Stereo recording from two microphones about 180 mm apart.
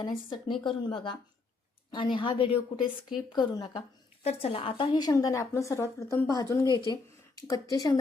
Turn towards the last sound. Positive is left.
turn(degrees=20)  # may be behind; listen again after turning